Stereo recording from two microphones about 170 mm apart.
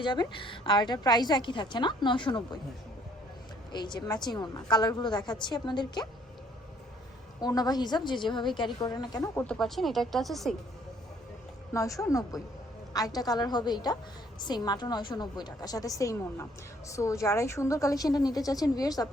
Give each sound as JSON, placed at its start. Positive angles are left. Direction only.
{"t": 0.0, "sound": "a woman's voice", "side_deg": 30}
{"t": 3.7, "sound": "a woman's voice", "side_deg": 25}
{"t": 7.4, "sound": "a woman's voice", "side_deg": 25}
{"t": 11.7, "sound": "a woman's voice", "side_deg": 20}